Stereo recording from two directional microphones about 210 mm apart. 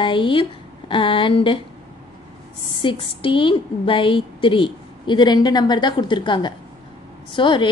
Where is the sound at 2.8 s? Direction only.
25° left (ahead or behind).